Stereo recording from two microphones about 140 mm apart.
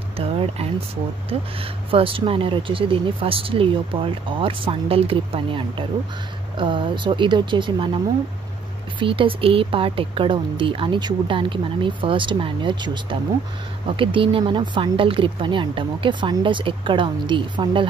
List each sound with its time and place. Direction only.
0.2 s a sound: 45° right (ahead or behind)
1.6 s speech: 40° right (ahead or behind)
9.0 s speech: 40° right (ahead or behind)